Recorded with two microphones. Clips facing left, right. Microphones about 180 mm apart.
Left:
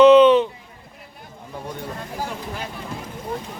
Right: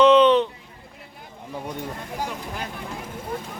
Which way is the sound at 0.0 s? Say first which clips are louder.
Left 4 dB; 5° left (ahead or behind).